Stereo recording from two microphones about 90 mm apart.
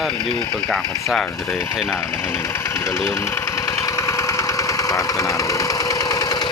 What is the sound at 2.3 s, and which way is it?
Engine, 30° left (ahead or behind).